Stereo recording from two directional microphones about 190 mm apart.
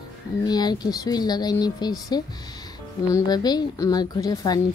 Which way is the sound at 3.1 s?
20° left (ahead or behind).